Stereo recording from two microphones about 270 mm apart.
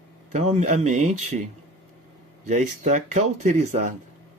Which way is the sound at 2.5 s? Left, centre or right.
Right.